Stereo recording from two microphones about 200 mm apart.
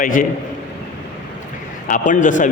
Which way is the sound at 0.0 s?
45° left (ahead or behind).